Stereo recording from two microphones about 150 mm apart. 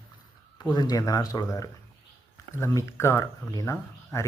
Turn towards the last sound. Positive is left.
turn(degrees=20)  # may be behind; listen again after turning